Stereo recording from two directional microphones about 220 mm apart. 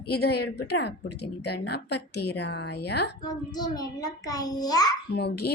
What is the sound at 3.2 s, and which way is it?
Child singing, 20° left (ahead or behind).